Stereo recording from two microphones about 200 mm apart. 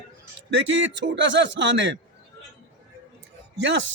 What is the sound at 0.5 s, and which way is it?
A man's voice, 70° right (ahead or behind).